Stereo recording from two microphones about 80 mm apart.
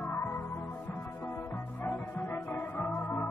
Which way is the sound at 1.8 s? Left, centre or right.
Left.